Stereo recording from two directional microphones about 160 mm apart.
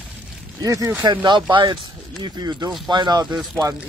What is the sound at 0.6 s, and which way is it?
Speech, 20° right (ahead or behind).